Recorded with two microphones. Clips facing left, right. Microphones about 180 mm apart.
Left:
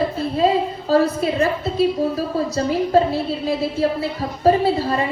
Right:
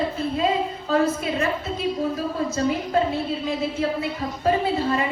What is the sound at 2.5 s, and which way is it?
Music, 35° left (ahead or behind).